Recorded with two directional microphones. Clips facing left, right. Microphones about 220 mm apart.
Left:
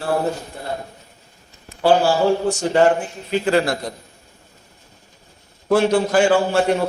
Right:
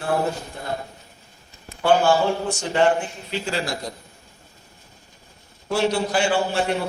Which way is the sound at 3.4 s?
55° left (ahead or behind).